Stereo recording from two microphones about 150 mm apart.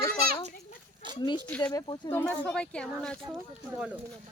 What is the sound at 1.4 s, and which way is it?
Speech, 10° left (ahead or behind).